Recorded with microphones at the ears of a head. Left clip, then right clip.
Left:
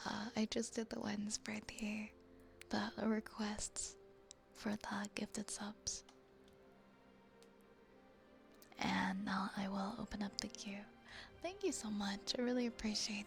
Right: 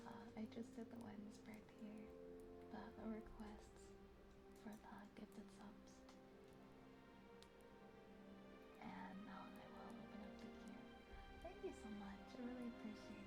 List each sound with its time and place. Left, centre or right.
0.0 s speech: left
8.7 s speech: left